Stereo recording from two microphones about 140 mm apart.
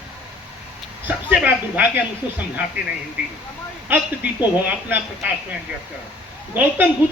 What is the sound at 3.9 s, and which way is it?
Speech, 15° right (ahead or behind).